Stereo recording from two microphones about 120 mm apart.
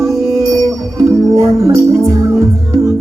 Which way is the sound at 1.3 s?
25° right (ahead or behind).